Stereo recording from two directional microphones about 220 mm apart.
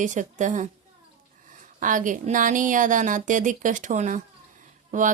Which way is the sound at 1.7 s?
35° right (ahead or behind).